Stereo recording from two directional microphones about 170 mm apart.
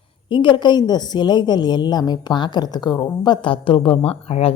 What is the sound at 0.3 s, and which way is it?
A woman's voice, 30° left (ahead or behind).